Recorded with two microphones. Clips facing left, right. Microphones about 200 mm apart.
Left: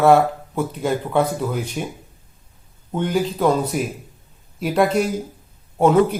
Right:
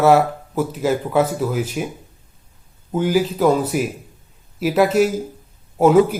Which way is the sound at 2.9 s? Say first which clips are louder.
Right 3 dB; 5° right (ahead or behind).